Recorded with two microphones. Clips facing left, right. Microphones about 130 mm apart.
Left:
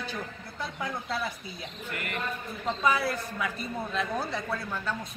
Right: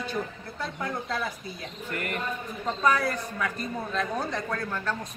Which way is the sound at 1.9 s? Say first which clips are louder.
Right 5 dB; 40° right (ahead or behind).